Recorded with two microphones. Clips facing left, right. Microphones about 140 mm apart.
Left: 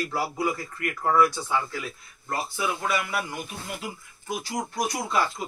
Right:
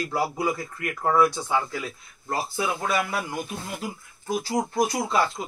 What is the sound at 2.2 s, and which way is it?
Speech, 30° right (ahead or behind).